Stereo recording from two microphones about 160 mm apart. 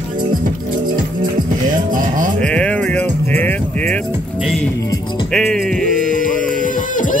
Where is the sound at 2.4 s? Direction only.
5° left (ahead or behind).